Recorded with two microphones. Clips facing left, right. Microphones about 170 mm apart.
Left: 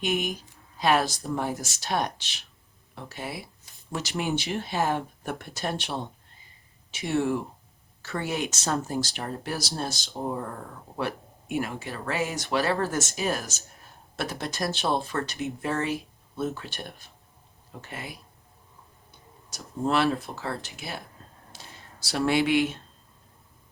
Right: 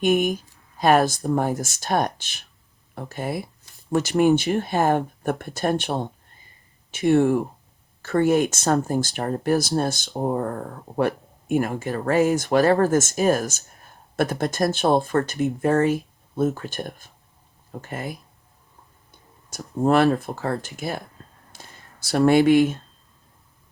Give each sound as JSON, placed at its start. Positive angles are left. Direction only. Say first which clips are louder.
{"t": 0.0, "sound": "speech", "louder": "right 8 dB", "side_deg": -45}
{"t": 19.5, "sound": "speech", "louder": "right 7 dB", "side_deg": -55}
{"t": 21.5, "sound": "a sound", "louder": "even", "side_deg": -50}